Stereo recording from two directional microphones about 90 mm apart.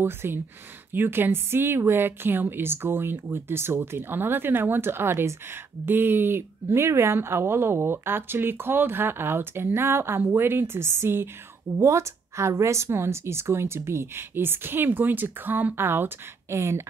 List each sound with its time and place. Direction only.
0.0 s speech: 25° right (ahead or behind)